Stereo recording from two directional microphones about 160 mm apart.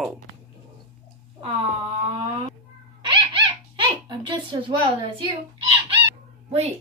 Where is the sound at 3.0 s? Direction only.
30° right (ahead or behind).